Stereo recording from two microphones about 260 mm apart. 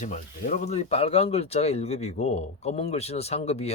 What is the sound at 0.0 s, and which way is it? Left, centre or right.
Speech, left.